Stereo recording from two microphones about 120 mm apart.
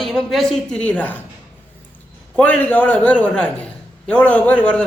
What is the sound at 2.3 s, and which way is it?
A man's voice, 10° left (ahead or behind).